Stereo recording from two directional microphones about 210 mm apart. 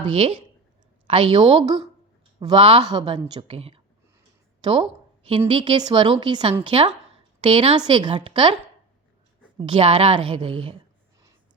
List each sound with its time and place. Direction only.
0.0 s a woman's voice: 25° right (ahead or behind)
4.6 s a sound: 25° right (ahead or behind)
5.5 s a woman's voice: 25° right (ahead or behind)
9.6 s a woman's voice: 25° right (ahead or behind)